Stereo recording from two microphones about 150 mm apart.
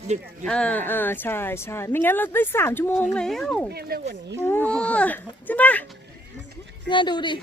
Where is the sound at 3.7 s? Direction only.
90° right.